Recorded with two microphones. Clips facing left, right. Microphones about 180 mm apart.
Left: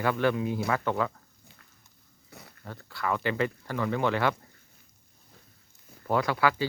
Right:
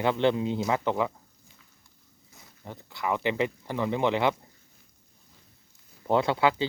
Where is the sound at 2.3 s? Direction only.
65° left (ahead or behind).